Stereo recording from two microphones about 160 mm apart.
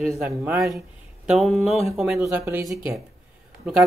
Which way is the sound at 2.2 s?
15° right (ahead or behind).